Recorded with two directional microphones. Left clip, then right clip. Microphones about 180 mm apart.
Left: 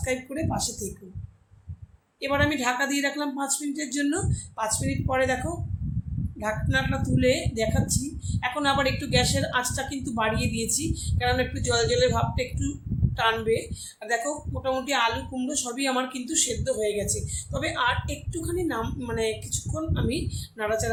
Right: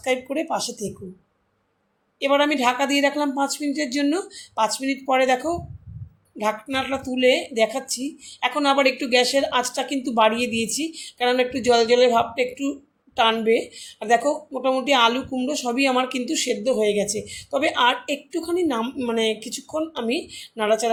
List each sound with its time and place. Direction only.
0.0 s speech: 30° right (ahead or behind)
2.2 s speech: 25° right (ahead or behind)
6.4 s a woman's voice: 30° right (ahead or behind)